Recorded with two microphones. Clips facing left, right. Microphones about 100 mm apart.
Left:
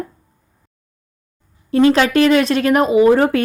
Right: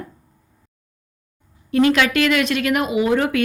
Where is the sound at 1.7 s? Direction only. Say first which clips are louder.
Left 4 dB; 30° left (ahead or behind).